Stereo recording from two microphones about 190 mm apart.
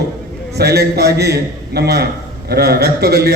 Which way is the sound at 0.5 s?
55° right (ahead or behind).